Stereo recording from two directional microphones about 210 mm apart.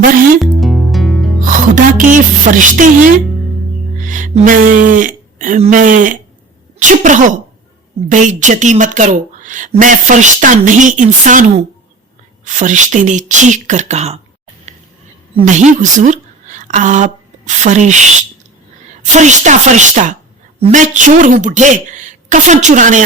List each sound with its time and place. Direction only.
0.5 s music: centre (ahead or behind)
1.5 s a woman's voice: 40° right (ahead or behind)
12.5 s a woman's voice: 35° right (ahead or behind)
15.4 s a woman's voice: 35° right (ahead or behind)
19.1 s a woman's voice: 35° right (ahead or behind)